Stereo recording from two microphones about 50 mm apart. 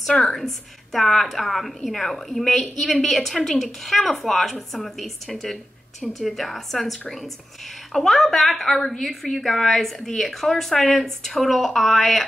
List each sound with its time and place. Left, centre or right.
0.1 s a woman's voice: centre